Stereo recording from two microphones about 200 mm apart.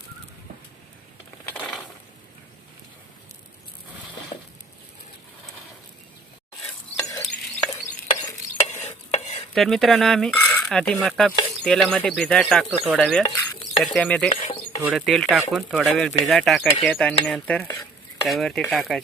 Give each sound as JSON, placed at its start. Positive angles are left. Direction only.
{"t": 4.3, "sound": "a sound", "side_deg": 35}
{"t": 7.0, "sound": "stir", "side_deg": 15}
{"t": 8.8, "sound": "stir", "side_deg": 35}
{"t": 9.6, "sound": "dishes", "side_deg": 0}
{"t": 13.2, "sound": "stir", "side_deg": 25}
{"t": 13.8, "sound": "dishes", "side_deg": 5}
{"t": 14.3, "sound": "a sound", "side_deg": 35}
{"t": 14.8, "sound": "dishes", "side_deg": 0}